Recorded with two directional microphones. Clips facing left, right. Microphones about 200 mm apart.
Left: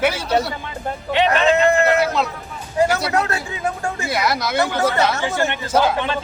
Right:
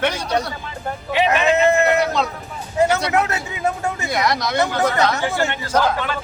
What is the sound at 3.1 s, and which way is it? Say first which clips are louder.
Speech: right 1 dB; 20° right (ahead or behind).